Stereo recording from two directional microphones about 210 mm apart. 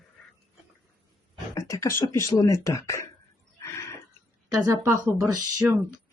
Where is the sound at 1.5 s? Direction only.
15° left (ahead or behind).